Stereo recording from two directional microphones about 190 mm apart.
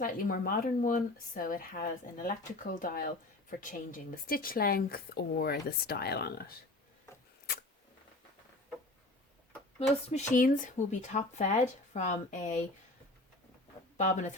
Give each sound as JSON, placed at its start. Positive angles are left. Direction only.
{"t": 0.0, "sound": "speech", "side_deg": 50}
{"t": 9.9, "sound": "speech", "side_deg": 35}
{"t": 14.0, "sound": "speech", "side_deg": 40}